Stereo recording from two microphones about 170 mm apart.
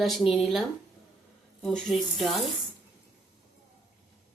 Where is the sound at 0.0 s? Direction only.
Centre (ahead or behind).